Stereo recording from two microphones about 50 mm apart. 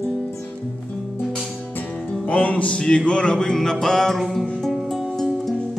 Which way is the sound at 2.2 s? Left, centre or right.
Left.